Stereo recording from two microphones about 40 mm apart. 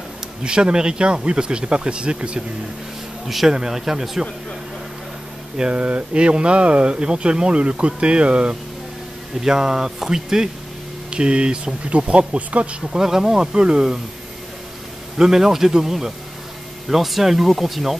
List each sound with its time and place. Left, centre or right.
0.4 s speech: right
3.3 s speech: centre
5.6 s speech: right
9.4 s speech: centre
12.9 s speech: centre
15.1 s speech: centre